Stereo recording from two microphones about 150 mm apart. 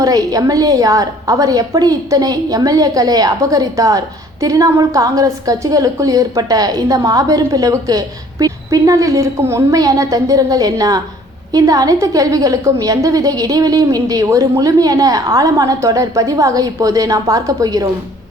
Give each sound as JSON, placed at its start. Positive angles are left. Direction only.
{"t": 0.0, "sound": "a woman's voice", "side_deg": -25}